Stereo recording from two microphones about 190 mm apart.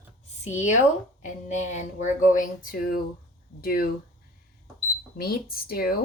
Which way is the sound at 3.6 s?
50° left (ahead or behind).